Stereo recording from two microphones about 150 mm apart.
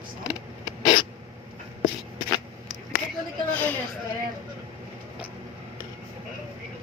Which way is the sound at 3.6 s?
10° left (ahead or behind).